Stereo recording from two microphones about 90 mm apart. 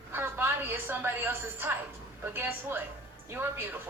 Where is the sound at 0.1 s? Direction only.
25° right (ahead or behind).